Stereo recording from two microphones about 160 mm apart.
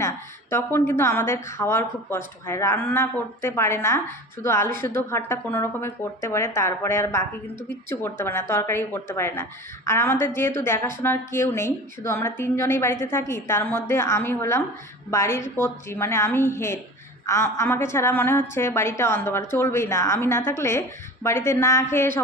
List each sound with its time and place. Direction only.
0.0 s a woman's voice: 15° left (ahead or behind)